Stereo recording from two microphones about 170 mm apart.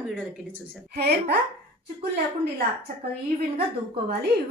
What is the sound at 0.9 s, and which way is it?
Speech, 70° right (ahead or behind).